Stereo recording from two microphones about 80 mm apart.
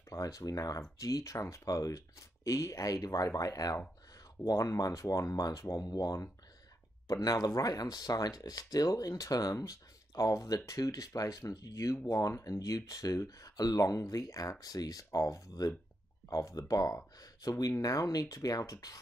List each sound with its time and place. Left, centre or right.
0.1 s speech: left